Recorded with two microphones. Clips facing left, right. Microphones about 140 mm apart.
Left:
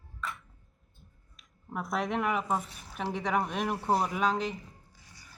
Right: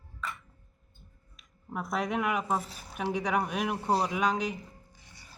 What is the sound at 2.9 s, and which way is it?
Speech, centre (ahead or behind).